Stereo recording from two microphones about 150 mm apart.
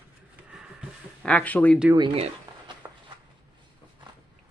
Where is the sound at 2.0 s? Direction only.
40° right (ahead or behind).